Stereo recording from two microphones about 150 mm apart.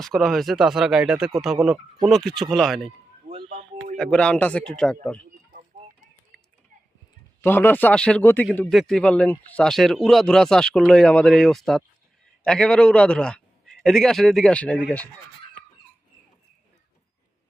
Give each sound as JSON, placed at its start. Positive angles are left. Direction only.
{"t": 0.0, "sound": "speech", "side_deg": 0}
{"t": 3.9, "sound": "speech", "side_deg": 5}
{"t": 6.3, "sound": "a sound", "side_deg": -80}
{"t": 7.4, "sound": "speech", "side_deg": 15}
{"t": 8.7, "sound": "speech", "side_deg": 0}